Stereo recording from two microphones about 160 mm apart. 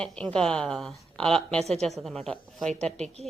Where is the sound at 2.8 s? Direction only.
40° right (ahead or behind).